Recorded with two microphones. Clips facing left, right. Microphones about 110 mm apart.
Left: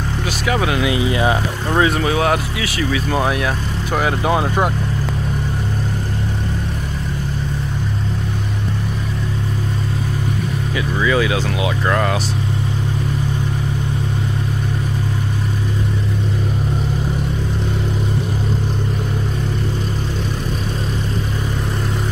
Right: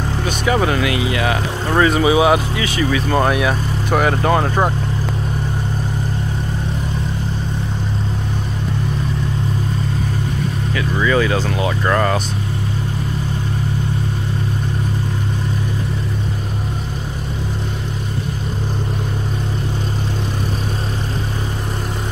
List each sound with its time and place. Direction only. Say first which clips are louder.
0.5 s speech: right 2 dB; 5° left (ahead or behind)
0.7 s speech: left 1 dB; 20° left (ahead or behind)
1.8 s speech: right 3 dB; centre (ahead or behind)
11.0 s speech: right 1 dB; 5° left (ahead or behind)